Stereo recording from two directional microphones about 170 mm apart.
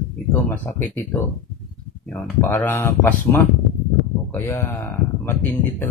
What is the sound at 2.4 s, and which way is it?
Speech, 10° left (ahead or behind).